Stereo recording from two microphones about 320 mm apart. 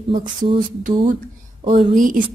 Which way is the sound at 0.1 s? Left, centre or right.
Right.